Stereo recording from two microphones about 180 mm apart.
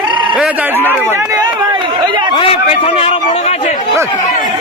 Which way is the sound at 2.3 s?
30° left (ahead or behind).